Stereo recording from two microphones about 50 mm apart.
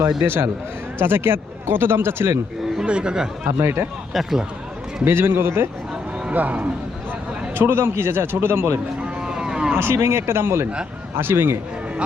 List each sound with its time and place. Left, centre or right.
0.9 s speech: right
2.8 s speech: centre
3.4 s speech: right
4.1 s speech: centre
5.0 s speech: right
6.3 s a man's voice: right
7.5 s speech: right
9.0 s cattle: centre
9.7 s speech: right